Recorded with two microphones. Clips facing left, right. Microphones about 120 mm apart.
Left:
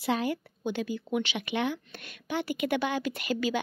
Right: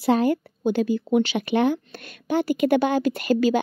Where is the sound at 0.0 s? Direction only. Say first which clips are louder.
Right 9 dB; 45° right (ahead or behind).